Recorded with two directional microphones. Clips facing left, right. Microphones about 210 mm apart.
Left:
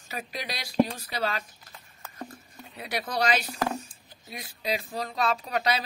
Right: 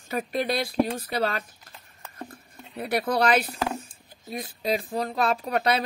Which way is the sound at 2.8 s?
55° right (ahead or behind).